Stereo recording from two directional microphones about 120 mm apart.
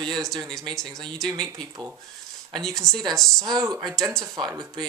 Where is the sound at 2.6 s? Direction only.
Centre (ahead or behind).